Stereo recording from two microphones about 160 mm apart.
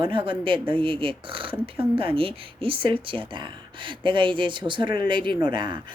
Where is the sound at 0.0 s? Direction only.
30° right (ahead or behind).